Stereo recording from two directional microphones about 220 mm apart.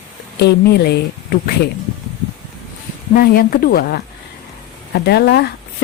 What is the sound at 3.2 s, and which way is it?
Speech, 40° left (ahead or behind).